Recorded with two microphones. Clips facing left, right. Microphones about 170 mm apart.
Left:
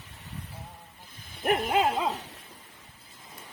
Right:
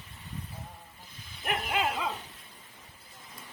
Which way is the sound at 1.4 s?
35° left (ahead or behind).